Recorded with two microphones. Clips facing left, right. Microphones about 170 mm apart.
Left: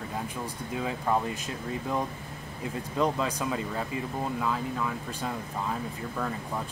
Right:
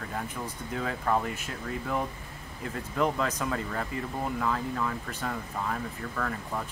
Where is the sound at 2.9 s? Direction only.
15° left (ahead or behind).